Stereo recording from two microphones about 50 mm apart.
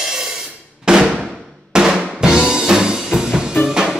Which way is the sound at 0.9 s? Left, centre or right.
Centre.